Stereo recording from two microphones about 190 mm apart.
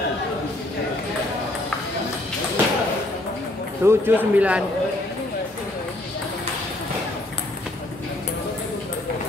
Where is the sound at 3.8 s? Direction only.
10° right (ahead or behind).